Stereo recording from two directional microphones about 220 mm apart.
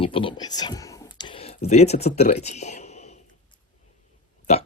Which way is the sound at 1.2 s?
25° left (ahead or behind).